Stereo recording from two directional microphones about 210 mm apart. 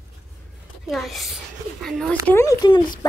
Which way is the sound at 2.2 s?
15° left (ahead or behind).